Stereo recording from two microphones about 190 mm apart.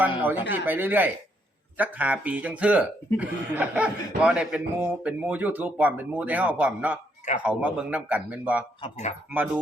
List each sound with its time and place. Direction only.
0.0 s speech: 10° right (ahead or behind)
8.8 s speech: 40° left (ahead or behind)